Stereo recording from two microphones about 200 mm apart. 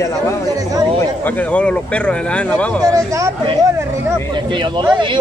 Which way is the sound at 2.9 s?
15° right (ahead or behind).